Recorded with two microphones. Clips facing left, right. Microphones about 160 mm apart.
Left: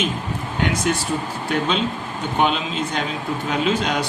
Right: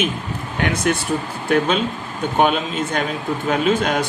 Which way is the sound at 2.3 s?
50° right (ahead or behind).